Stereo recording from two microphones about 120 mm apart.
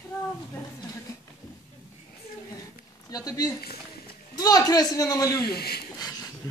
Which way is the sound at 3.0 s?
30° left (ahead or behind).